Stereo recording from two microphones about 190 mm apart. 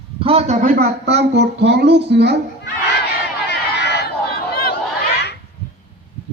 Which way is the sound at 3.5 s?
60° left (ahead or behind).